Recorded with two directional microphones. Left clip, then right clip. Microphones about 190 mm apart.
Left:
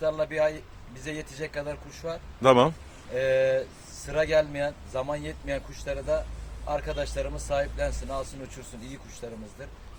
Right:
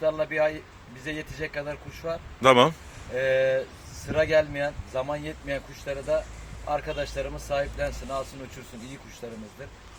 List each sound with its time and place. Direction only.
0.0 s a man's voice: 10° left (ahead or behind)
9.2 s speech: 5° left (ahead or behind)